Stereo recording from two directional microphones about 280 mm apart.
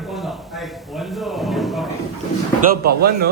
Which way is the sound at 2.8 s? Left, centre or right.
Right.